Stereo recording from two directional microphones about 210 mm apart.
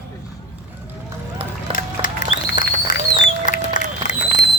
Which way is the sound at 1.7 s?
25° right (ahead or behind).